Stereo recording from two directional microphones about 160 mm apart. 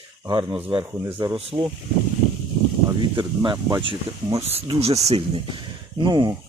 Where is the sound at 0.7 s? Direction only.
25° right (ahead or behind).